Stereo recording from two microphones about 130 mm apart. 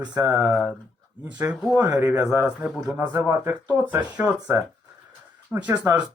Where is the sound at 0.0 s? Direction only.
10° right (ahead or behind).